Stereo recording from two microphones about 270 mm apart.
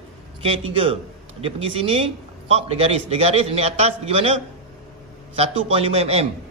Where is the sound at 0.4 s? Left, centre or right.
Right.